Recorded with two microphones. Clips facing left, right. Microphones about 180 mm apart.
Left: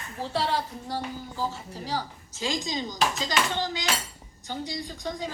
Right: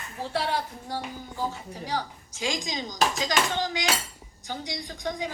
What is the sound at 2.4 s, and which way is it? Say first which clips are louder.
A woman's voice: left 1 dB; 15° right (ahead or behind).